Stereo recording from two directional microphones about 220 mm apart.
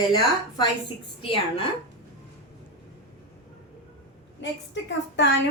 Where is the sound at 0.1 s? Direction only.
20° left (ahead or behind).